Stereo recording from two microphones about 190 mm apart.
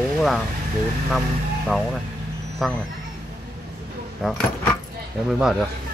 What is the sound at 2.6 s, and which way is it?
Speech, centre (ahead or behind).